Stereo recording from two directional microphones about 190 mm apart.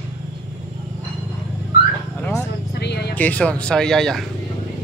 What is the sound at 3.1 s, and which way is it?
A man's voice, 10° left (ahead or behind).